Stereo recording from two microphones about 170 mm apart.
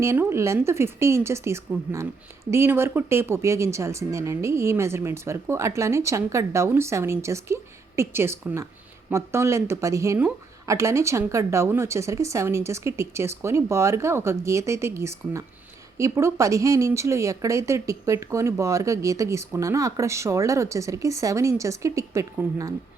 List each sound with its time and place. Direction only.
0.0 s speech: 15° right (ahead or behind)